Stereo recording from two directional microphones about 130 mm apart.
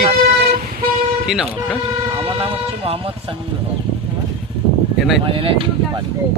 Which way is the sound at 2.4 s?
45° right (ahead or behind).